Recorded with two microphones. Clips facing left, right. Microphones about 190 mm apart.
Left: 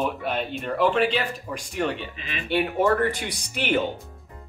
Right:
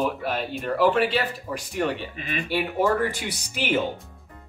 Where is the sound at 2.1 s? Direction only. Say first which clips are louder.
Right 5 dB; 50° right (ahead or behind).